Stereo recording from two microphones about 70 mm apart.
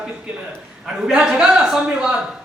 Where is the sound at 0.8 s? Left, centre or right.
Centre.